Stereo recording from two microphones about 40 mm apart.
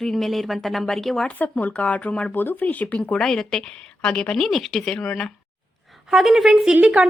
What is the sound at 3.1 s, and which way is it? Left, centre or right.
Speech, centre.